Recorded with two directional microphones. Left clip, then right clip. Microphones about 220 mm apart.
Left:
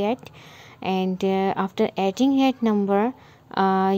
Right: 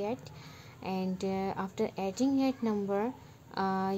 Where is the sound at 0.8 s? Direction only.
35° left (ahead or behind).